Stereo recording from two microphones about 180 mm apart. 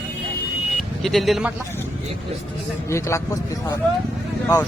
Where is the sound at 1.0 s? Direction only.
Centre (ahead or behind).